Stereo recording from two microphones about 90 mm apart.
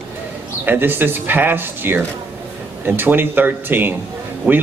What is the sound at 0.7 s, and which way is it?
Speech, 25° right (ahead or behind).